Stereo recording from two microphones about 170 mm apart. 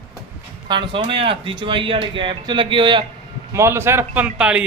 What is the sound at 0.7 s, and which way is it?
Speech, 30° right (ahead or behind).